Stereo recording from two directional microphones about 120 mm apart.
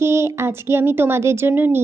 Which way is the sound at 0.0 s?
20° right (ahead or behind).